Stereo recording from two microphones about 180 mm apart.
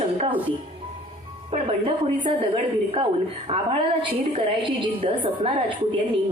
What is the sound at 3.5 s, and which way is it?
Speech, 30° right (ahead or behind).